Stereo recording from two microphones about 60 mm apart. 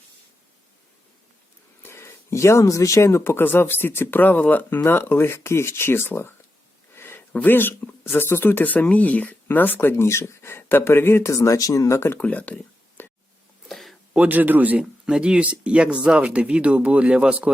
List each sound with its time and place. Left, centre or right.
1.8 s speech: left
3.3 s speech: left
6.9 s a sound: left
7.3 s speech: left
11.3 s speech: left
12.2 s speech: left
13.0 s a sound: left
13.7 s a sound: centre
14.2 s speech: right
15.0 s speech: centre